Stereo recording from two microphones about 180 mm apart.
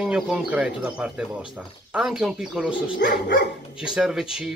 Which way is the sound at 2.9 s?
70° left (ahead or behind).